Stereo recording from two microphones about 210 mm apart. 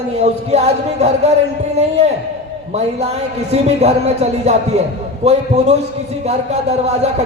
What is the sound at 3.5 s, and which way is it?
Speech, 30° right (ahead or behind).